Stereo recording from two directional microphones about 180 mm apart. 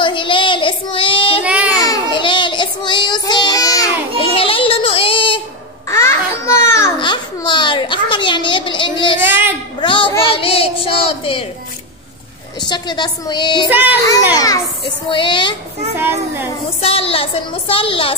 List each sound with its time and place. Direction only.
0.0 s child singing: 25° left (ahead or behind)
1.4 s child singing: 5° right (ahead or behind)
1.8 s child singing: 25° left (ahead or behind)
4.2 s child singing: 30° left (ahead or behind)
5.9 s babbling: 15° left (ahead or behind)
7.0 s a sound: 25° left (ahead or behind)
9.2 s a sound: 10° right (ahead or behind)
9.8 s a sound: 25° left (ahead or behind)
10.3 s child singing: 30° left (ahead or behind)
12.5 s a woman's voice: 25° left (ahead or behind)
13.7 s a child's voice: 10° right (ahead or behind)
14.3 s a woman's voice: 20° left (ahead or behind)
16.0 s a child's voice: 10° right (ahead or behind)
16.8 s a woman's voice: 30° left (ahead or behind)